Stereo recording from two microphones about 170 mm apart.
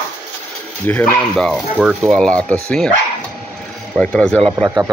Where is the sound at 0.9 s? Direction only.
10° left (ahead or behind).